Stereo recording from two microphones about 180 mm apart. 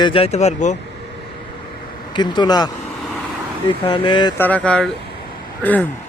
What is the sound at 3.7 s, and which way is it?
Speech, 25° left (ahead or behind).